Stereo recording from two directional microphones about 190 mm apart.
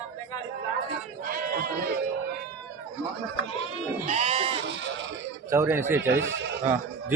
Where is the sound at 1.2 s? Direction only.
50° right (ahead or behind).